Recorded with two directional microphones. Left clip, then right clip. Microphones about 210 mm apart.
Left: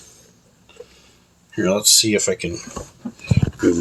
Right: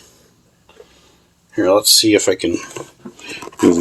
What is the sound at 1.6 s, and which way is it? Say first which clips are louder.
Speech: right 4 dB; 40° right (ahead or behind).